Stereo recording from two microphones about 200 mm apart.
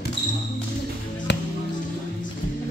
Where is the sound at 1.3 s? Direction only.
60° left (ahead or behind).